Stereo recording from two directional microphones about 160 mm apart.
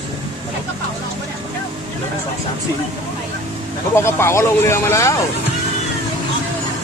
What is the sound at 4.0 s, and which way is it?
Speech, 15° left (ahead or behind).